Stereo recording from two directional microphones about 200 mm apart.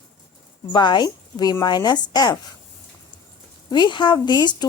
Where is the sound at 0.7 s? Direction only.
20° left (ahead or behind).